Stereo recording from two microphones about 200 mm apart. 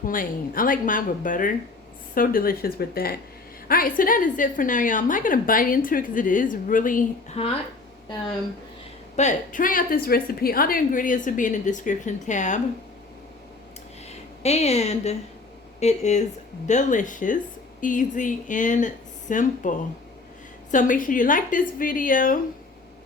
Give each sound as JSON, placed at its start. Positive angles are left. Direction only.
{"t": 0.0, "sound": "a woman's voice", "side_deg": 45}
{"t": 9.1, "sound": "a woman's voice", "side_deg": 40}
{"t": 14.1, "sound": "a woman's voice", "side_deg": 30}